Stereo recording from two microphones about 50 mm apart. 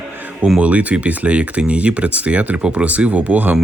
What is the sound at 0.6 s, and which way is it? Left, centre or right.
Speech, right.